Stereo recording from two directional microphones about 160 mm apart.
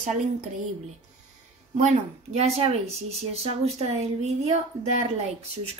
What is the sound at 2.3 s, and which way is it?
Speech, 40° right (ahead or behind).